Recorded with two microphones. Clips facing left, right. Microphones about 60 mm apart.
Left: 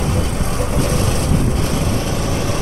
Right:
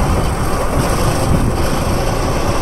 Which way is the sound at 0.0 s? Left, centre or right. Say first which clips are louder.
Right 3 dB; right.